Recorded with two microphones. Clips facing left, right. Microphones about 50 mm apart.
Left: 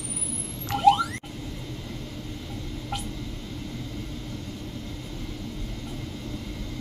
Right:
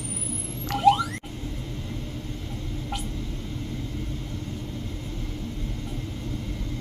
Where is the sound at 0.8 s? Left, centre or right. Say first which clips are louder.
Even; centre.